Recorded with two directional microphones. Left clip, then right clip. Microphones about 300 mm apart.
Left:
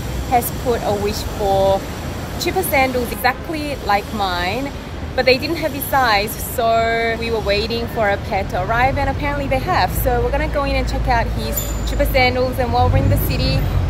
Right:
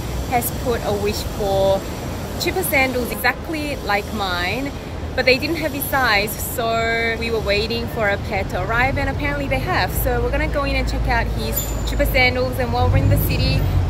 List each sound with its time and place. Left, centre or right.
0.3 s speech: centre
2.4 s speech: centre
13.3 s speech: left